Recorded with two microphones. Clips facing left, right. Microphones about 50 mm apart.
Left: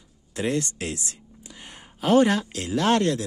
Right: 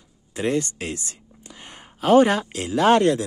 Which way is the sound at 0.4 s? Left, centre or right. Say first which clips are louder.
Right 2 dB; centre.